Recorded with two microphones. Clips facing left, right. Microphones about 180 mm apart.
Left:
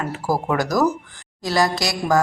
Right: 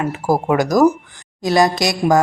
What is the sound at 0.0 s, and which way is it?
Speech, 15° right (ahead or behind).